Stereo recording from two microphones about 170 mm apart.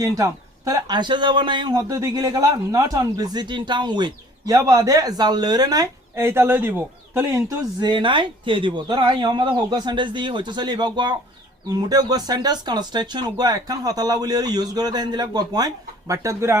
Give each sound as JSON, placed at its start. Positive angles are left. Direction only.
{"t": 0.0, "sound": "speech", "side_deg": -20}